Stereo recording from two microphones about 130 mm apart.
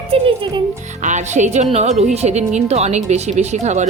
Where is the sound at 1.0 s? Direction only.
65° right (ahead or behind).